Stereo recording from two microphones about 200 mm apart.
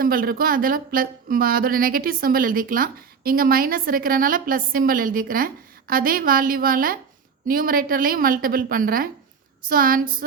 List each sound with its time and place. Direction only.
0.0 s speech: 45° right (ahead or behind)